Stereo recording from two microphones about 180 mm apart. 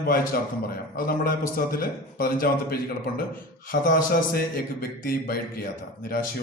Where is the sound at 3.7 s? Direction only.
55° left (ahead or behind).